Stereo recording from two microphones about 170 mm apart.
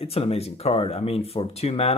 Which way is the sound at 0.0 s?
35° left (ahead or behind).